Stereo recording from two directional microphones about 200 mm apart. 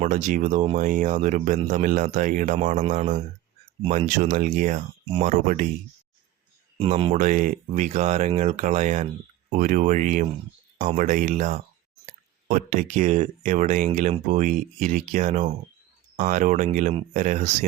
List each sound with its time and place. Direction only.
0.0 s speech: 35° right (ahead or behind)
6.7 s speech: 30° right (ahead or behind)